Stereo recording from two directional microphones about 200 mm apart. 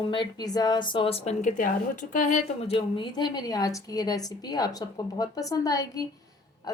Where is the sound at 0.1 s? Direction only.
20° left (ahead or behind).